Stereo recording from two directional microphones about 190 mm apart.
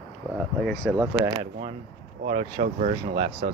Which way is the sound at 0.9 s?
20° right (ahead or behind).